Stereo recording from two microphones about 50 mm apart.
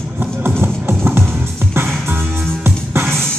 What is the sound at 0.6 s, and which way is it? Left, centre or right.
Music, right.